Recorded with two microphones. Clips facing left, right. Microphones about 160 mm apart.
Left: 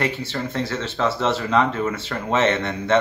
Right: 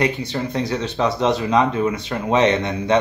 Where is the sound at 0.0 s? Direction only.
15° right (ahead or behind).